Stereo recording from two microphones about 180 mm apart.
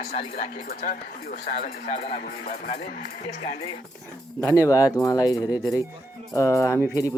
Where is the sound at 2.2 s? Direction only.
55° left (ahead or behind).